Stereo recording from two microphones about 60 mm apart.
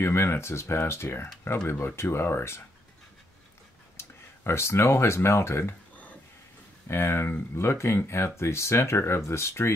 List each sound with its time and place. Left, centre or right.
0.0 s speech: left
4.5 s speech: left
6.9 s speech: left